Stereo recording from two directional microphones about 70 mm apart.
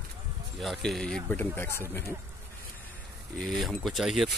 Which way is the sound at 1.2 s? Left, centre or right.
Left.